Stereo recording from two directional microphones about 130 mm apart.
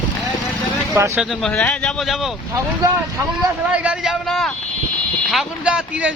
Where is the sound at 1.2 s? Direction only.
Centre (ahead or behind).